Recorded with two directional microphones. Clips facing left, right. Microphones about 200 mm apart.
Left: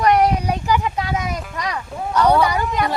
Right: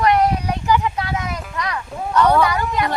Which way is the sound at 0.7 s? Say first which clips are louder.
Right 3 dB; 15° left (ahead or behind).